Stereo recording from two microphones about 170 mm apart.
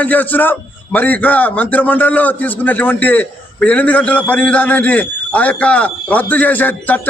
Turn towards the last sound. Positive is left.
turn(degrees=10)  # may be behind; listen again after turning